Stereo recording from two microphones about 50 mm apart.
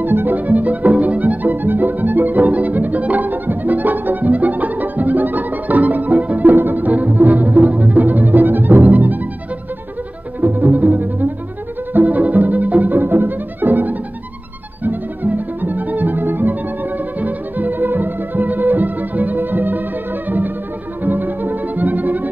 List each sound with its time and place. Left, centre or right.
0.0 s music: right
10.4 s bowed string instrument: right
11.9 s music: right
14.8 s violin: right
20.2 s music: right